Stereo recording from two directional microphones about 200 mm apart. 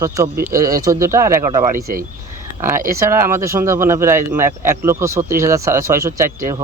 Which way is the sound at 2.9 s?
15° right (ahead or behind).